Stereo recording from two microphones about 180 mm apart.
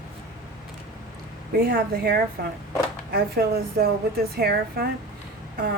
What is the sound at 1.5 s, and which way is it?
Speech, 60° right (ahead or behind).